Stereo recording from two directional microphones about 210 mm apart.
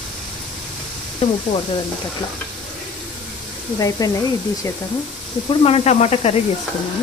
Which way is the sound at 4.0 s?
15° left (ahead or behind).